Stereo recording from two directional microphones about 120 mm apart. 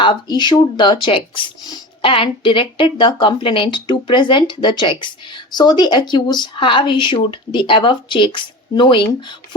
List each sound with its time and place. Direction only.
0.0 s speech: 40° left (ahead or behind)